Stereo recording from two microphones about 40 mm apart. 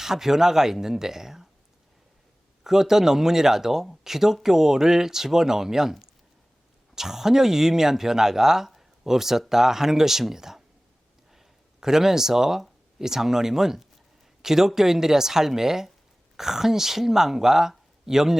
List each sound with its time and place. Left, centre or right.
0.0 s speech: centre
2.6 s speech: centre